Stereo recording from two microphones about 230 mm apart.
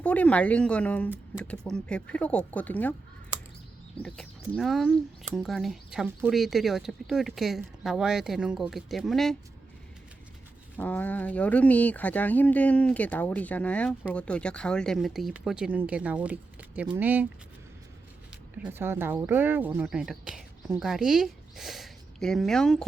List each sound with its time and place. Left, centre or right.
0.0 s speech: centre
3.9 s speech: centre
10.8 s speech: centre
18.6 s speech: centre